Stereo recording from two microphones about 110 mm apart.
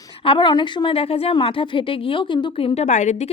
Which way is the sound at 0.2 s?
50° left (ahead or behind).